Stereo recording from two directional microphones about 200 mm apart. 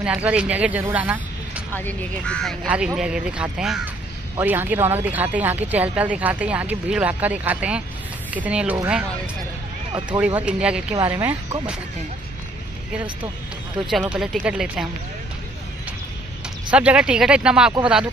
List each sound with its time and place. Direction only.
0.0 s speech: 5° right (ahead or behind)
1.7 s speech: 10° left (ahead or behind)
9.9 s speech: 25° right (ahead or behind)
10.2 s speech: 5° right (ahead or behind)
13.8 s speech: centre (ahead or behind)
16.7 s speech: 5° right (ahead or behind)